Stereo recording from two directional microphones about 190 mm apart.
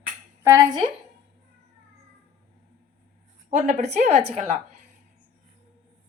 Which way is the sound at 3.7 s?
40° right (ahead or behind).